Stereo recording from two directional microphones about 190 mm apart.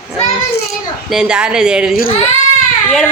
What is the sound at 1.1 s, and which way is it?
Speech, 5° right (ahead or behind).